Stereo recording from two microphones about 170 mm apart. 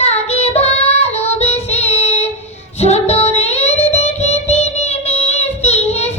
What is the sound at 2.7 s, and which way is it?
Music, 40° left (ahead or behind).